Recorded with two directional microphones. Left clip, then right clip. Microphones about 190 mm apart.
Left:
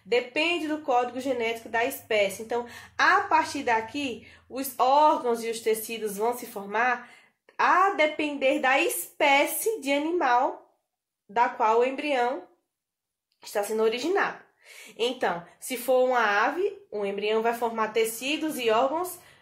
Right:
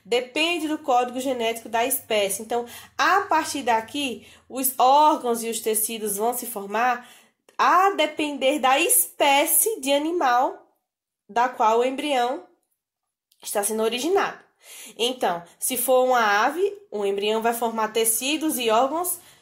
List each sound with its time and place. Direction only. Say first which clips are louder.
0.1 s speech: right 2 dB; 40° right (ahead or behind)
13.4 s speech: right 1 dB; 45° right (ahead or behind)